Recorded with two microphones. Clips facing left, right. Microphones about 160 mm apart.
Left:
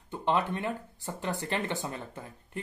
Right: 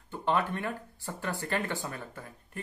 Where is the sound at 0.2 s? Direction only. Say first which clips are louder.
Left 1 dB; 20° left (ahead or behind).